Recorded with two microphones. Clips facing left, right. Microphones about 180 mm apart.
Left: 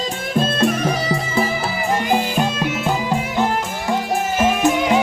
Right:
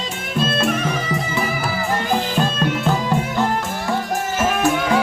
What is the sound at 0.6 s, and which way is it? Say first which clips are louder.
Music: left 2 dB; 35° left (ahead or behind).